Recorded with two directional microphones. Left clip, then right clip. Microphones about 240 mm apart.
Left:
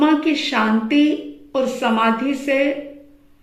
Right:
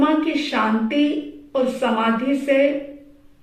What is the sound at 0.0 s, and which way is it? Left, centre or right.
A woman's voice, left.